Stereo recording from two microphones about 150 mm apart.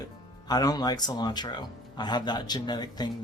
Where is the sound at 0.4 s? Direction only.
25° left (ahead or behind).